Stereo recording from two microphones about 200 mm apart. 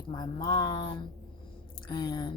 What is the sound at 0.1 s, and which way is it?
A woman's voice, 20° left (ahead or behind).